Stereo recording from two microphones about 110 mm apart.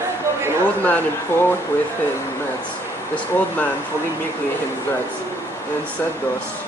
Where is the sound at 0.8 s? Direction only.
15° left (ahead or behind).